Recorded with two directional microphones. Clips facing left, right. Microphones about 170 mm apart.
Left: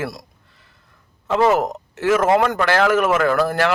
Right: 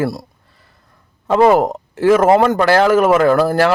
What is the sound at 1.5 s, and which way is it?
Speech, 30° right (ahead or behind).